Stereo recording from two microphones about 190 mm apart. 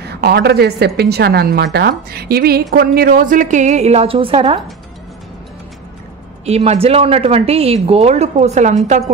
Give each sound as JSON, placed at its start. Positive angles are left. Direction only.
{"t": 0.0, "sound": "a woman's voice", "side_deg": -60}
{"t": 6.4, "sound": "speech", "side_deg": -35}